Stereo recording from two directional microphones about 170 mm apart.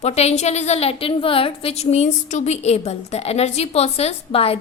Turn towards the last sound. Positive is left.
turn(degrees=35)  # may be behind; listen again after turning